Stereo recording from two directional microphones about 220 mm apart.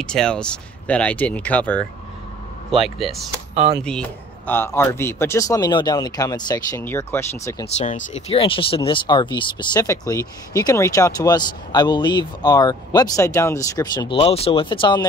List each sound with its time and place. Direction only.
0.0 s speech: 5° left (ahead or behind)
7.7 s speech: 30° left (ahead or behind)